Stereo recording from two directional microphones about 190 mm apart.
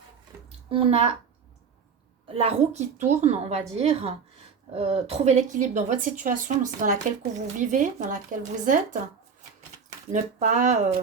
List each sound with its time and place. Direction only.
0.7 s a woman's voice: 30° right (ahead or behind)
2.2 s a woman's voice: 30° right (ahead or behind)
10.1 s a woman's voice: 40° right (ahead or behind)